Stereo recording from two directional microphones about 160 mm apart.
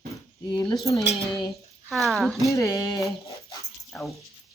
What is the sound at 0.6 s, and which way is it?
Speech, centre (ahead or behind).